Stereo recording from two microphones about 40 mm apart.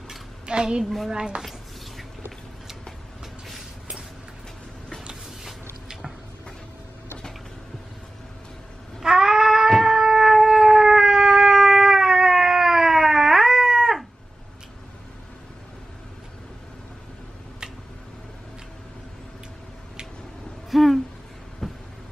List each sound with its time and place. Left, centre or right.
0.5 s a woman's voice: right
0.8 s a woman's voice: centre
1.1 s a woman's voice: right
9.0 s cat: centre
9.7 s shofar: centre
20.7 s a sound: centre